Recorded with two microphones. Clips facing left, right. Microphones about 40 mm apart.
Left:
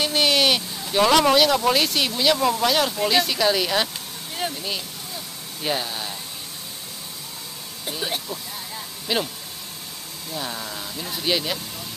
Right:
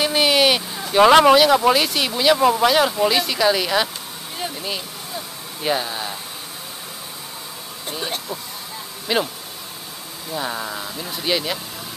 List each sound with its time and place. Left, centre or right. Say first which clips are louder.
0.0 s a sound: right 3 dB; centre
0.7 s speech: right 7 dB; right
1.3 s speech: right 4 dB; centre
3.1 s speech: right 2 dB; centre
4.6 s a sound: right 2 dB; centre
7.9 s speech: right 1 dB; centre
10.3 s speech: right 5 dB; centre
10.8 s speech: right 2 dB; centre